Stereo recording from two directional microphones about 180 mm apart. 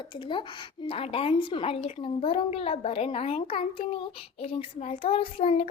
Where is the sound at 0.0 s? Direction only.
25° left (ahead or behind).